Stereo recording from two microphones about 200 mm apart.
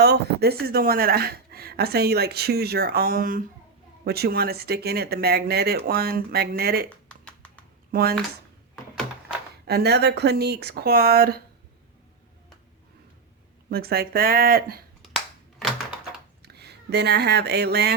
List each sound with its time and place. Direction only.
0.0 s a sound: 55° right (ahead or behind)
0.6 s a woman's voice: 50° right (ahead or behind)
6.9 s a sound: 5° left (ahead or behind)
7.9 s speech: 50° right (ahead or behind)
9.6 s a woman's voice: 55° right (ahead or behind)
13.7 s a woman's voice: 50° right (ahead or behind)
15.0 s cap gun: centre (ahead or behind)
16.4 s speech: 55° right (ahead or behind)